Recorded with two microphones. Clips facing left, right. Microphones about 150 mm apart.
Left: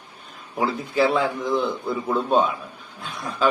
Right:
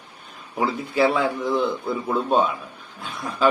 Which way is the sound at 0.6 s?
5° right (ahead or behind).